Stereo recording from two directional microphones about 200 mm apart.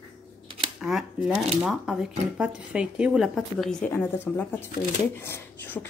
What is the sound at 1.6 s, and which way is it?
Dishes, 5° right (ahead or behind).